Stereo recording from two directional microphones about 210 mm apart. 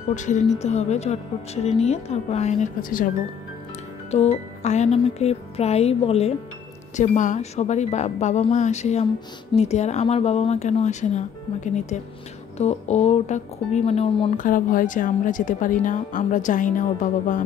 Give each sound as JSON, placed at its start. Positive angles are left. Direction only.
{"t": 0.1, "sound": "speech", "side_deg": 35}
{"t": 4.1, "sound": "speech", "side_deg": 30}